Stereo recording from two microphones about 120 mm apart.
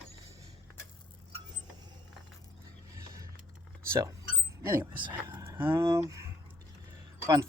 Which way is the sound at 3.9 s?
25° right (ahead or behind).